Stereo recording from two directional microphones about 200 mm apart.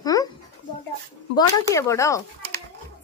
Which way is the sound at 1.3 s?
15° left (ahead or behind).